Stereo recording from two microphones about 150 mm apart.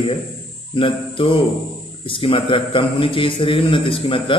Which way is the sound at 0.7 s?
35° left (ahead or behind).